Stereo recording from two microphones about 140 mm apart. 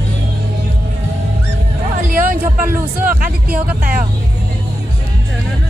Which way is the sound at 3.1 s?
90° right.